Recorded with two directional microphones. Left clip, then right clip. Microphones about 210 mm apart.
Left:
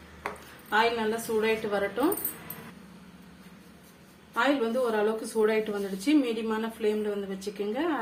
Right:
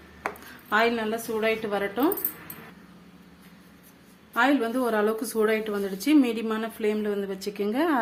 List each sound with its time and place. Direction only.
0.7 s a woman's voice: 45° right (ahead or behind)
1.4 s a woman's voice: 35° right (ahead or behind)
4.4 s a woman's voice: 50° right (ahead or behind)